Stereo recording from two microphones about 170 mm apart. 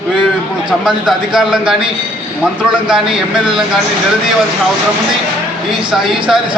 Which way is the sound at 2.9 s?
5° right (ahead or behind).